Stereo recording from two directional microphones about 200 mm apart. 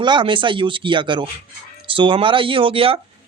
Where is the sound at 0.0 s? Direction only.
25° right (ahead or behind).